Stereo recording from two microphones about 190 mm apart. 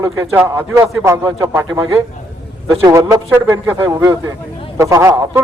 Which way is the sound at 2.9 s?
15° right (ahead or behind).